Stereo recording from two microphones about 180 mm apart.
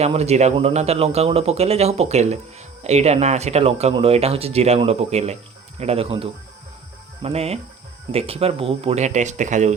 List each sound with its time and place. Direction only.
0.0 s speech: 35° right (ahead or behind)